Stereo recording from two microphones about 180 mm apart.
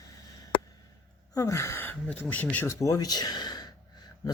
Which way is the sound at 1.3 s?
15° left (ahead or behind).